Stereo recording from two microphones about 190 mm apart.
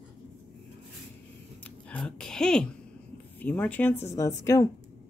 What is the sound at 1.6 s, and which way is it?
Speech, 5° left (ahead or behind).